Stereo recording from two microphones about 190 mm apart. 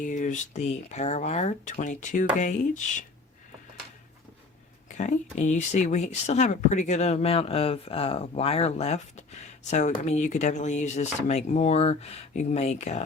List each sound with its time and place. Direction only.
0.0 s speech: 40° left (ahead or behind)
4.9 s speech: 40° left (ahead or behind)